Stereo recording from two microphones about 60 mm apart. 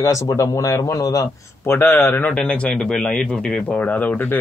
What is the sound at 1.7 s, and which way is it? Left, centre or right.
Speech, left.